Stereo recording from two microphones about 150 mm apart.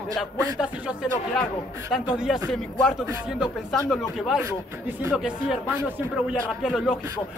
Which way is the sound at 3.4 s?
5° right (ahead or behind).